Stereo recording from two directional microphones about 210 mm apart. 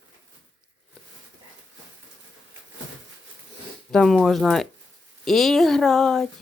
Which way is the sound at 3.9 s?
Centre (ahead or behind).